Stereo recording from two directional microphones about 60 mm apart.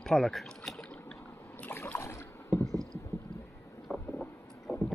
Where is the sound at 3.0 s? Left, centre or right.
Left.